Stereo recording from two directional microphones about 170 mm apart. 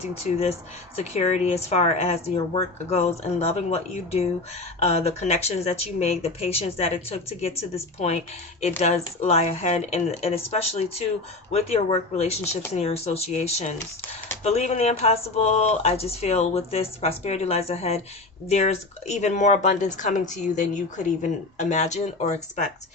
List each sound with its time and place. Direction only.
0.2 s speech: 40° left (ahead or behind)